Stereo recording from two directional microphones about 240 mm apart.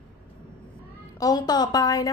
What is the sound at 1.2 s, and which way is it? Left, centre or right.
Speech, centre.